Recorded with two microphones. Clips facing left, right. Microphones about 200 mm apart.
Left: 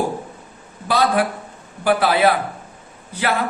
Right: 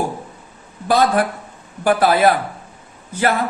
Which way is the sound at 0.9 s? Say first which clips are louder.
Right 2 dB; 45° right (ahead or behind).